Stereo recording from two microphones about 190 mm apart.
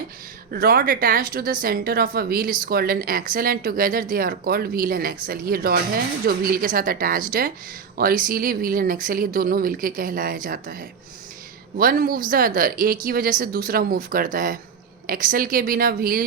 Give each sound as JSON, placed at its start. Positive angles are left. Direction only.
{"t": 0.5, "sound": "speech", "side_deg": -50}